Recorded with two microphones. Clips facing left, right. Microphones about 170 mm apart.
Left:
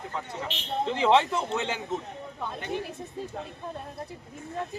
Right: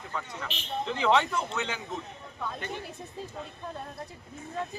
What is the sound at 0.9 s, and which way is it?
Speech, 30° left (ahead or behind).